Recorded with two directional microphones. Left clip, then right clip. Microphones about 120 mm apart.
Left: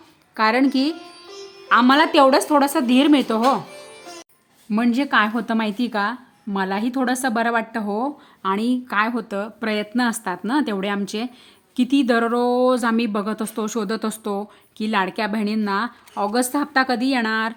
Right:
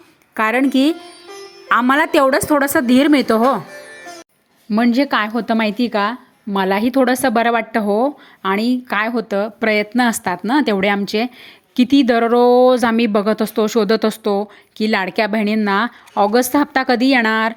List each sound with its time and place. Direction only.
0.3 s speech: 25° right (ahead or behind)
4.7 s speech: 20° right (ahead or behind)
6.6 s speech: 35° right (ahead or behind)